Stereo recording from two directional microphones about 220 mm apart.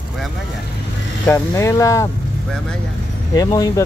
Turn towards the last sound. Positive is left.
turn(degrees=15)  # may be behind; listen again after turning